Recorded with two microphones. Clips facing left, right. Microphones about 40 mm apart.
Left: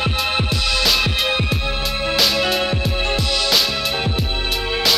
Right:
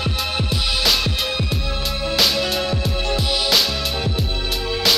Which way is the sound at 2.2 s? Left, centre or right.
Centre.